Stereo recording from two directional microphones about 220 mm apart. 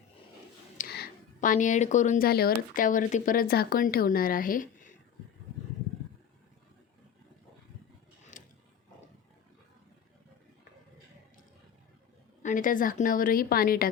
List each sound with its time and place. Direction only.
0.8 s speech: 45° left (ahead or behind)
8.3 s a sound: 35° left (ahead or behind)
12.4 s speech: 35° left (ahead or behind)